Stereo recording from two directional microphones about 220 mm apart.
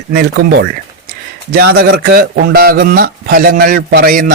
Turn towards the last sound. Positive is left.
turn(degrees=-40)  # may be behind; listen again after turning